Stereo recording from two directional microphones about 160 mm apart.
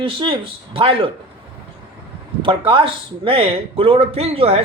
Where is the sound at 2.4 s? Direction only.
30° right (ahead or behind).